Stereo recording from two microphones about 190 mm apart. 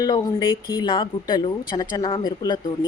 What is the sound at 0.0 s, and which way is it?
Speech, 20° left (ahead or behind).